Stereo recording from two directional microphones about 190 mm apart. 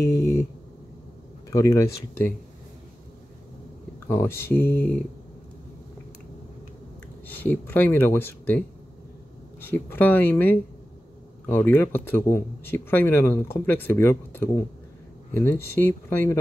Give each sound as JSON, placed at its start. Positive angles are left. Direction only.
{"t": 0.0, "sound": "a sound", "side_deg": 15}
{"t": 1.5, "sound": "speech", "side_deg": 15}
{"t": 4.1, "sound": "speech", "side_deg": 10}
{"t": 7.2, "sound": "speech", "side_deg": 10}